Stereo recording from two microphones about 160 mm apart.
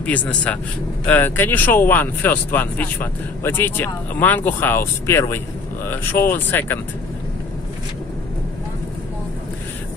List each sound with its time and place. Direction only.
0.0 s speech: 10° left (ahead or behind)